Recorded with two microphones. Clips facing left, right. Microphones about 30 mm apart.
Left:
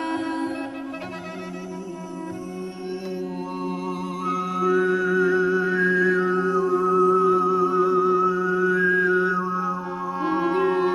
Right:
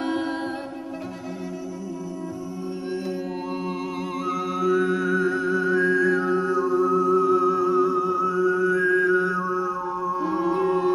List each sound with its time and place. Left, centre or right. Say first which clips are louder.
3.6 s humming: even; centre
4.3 s music: left 1 dB; centre
9.9 s music: left 1 dB; left